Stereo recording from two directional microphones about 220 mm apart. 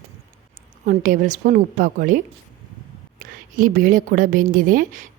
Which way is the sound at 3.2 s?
40° right (ahead or behind).